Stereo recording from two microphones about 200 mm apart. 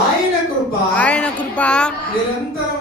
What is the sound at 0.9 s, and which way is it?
Speech, 5° left (ahead or behind).